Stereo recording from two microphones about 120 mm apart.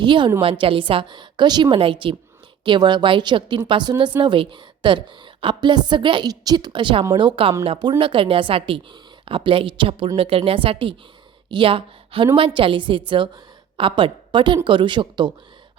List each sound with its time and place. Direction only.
0.0 s a woman's voice: 40° right (ahead or behind)